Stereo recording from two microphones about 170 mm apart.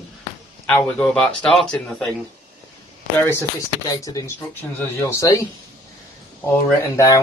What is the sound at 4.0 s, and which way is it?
Speech, 20° left (ahead or behind).